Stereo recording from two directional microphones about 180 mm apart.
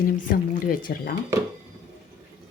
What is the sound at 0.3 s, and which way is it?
Speech, 50° left (ahead or behind).